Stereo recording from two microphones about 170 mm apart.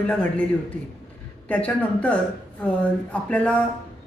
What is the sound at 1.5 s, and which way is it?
Speech, 5° left (ahead or behind).